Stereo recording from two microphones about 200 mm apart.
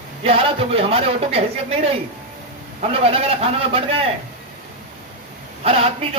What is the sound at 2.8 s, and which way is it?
A man's voice, 30° right (ahead or behind).